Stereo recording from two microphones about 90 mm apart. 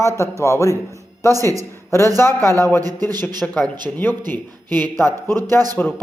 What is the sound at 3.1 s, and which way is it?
Speech, 50° right (ahead or behind).